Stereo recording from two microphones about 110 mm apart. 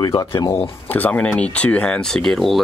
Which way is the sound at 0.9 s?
15° left (ahead or behind).